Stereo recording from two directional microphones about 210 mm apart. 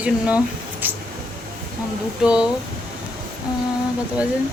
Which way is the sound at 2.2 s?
5° right (ahead or behind).